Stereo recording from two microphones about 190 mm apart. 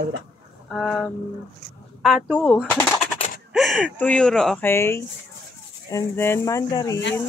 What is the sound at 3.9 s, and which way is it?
Speech, 5° left (ahead or behind).